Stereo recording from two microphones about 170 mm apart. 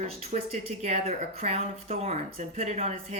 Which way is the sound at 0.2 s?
40° right (ahead or behind).